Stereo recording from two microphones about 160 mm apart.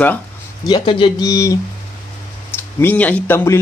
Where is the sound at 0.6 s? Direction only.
30° left (ahead or behind).